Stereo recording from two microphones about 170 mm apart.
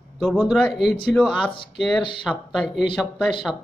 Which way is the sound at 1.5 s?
30° left (ahead or behind).